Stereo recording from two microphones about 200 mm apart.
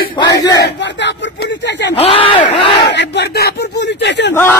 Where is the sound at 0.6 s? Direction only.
60° left (ahead or behind).